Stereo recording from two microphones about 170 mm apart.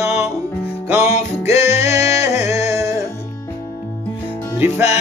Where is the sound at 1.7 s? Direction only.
15° right (ahead or behind).